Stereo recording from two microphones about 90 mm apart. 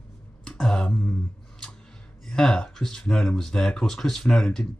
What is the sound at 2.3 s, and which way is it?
Speech, 5° left (ahead or behind).